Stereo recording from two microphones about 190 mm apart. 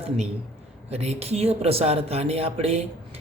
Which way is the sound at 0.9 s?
35° right (ahead or behind).